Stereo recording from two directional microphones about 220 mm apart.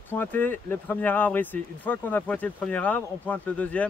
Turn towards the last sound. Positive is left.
turn(degrees=5)  # may be behind; listen again after turning